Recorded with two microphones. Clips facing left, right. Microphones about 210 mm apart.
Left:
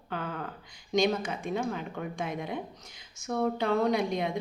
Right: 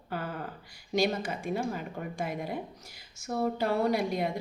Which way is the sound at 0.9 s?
5° right (ahead or behind).